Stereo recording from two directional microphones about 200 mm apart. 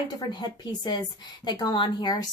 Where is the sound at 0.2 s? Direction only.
20° left (ahead or behind).